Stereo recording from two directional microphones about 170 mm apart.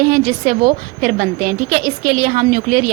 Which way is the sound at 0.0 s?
60° right (ahead or behind).